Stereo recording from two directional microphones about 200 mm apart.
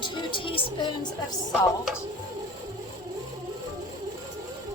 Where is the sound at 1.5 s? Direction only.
Centre (ahead or behind).